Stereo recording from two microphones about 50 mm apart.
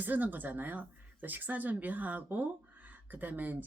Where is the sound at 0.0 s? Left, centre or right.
Right.